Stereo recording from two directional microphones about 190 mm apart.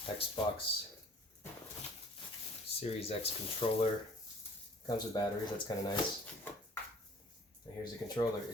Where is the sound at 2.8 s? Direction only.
30° left (ahead or behind).